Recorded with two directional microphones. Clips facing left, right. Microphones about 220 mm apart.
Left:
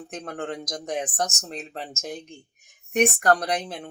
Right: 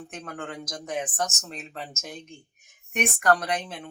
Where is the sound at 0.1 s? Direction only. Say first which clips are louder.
Left 6 dB; 35° left (ahead or behind).